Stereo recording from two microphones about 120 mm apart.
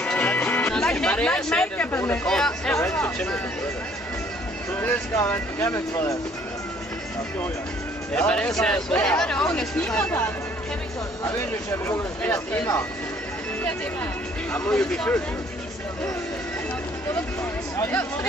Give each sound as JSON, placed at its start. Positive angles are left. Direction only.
{"t": 0.0, "sound": "music", "side_deg": 10}
{"t": 2.2, "sound": "speech", "side_deg": 5}
{"t": 4.7, "sound": "speech", "side_deg": 20}
{"t": 8.1, "sound": "speech", "side_deg": 10}
{"t": 11.3, "sound": "speech", "side_deg": 20}
{"t": 14.5, "sound": "speech", "side_deg": 10}
{"t": 17.7, "sound": "speech", "side_deg": 15}